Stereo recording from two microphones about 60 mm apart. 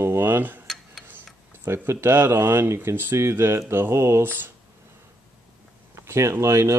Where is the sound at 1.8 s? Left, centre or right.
Right.